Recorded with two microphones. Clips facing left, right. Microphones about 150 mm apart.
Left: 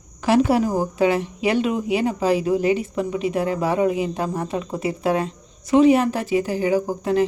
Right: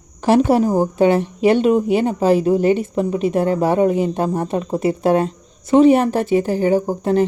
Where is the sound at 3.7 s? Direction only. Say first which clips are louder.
Right 3 dB; 50° right (ahead or behind).